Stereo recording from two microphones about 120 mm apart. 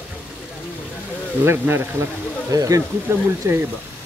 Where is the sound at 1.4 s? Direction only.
20° right (ahead or behind).